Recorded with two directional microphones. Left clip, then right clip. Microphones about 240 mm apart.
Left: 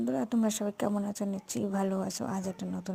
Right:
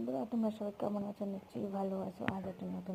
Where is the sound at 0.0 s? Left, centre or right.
Left.